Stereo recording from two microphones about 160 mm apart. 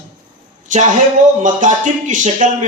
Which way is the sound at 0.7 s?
50° right (ahead or behind).